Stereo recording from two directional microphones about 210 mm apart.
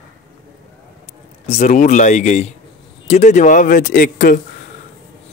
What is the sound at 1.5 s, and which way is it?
Speech, 35° left (ahead or behind).